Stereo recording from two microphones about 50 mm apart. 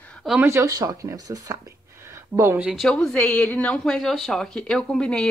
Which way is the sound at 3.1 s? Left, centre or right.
Left.